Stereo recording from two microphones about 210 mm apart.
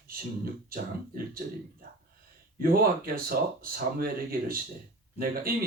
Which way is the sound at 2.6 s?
45° right (ahead or behind).